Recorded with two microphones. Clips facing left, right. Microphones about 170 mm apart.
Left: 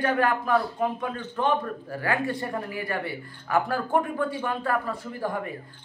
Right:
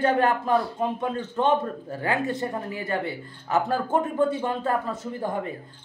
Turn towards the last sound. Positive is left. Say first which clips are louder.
# right 3 dB
turn(degrees=-25)  # may be behind; listen again after turning